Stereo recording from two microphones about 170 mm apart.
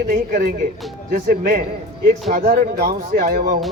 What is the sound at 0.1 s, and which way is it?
Speech, 55° right (ahead or behind).